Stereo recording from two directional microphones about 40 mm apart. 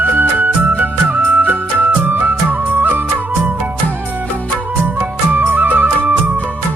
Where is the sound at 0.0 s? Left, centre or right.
Right.